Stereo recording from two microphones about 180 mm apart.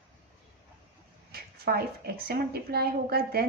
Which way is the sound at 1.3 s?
60° right (ahead or behind).